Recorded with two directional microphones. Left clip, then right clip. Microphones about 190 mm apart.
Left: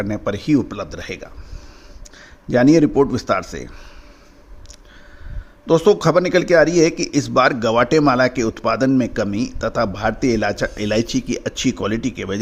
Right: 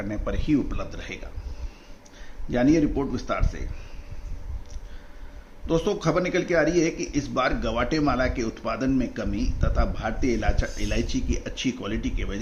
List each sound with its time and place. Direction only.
0.0 s a man's voice: 55° left (ahead or behind)
2.5 s a man's voice: 65° left (ahead or behind)
5.6 s a man's voice: 60° left (ahead or behind)